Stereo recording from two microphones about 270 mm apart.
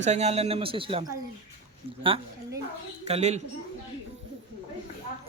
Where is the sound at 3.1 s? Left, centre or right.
Right.